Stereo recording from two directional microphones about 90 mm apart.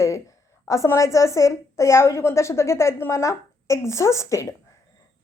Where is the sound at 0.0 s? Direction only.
35° left (ahead or behind).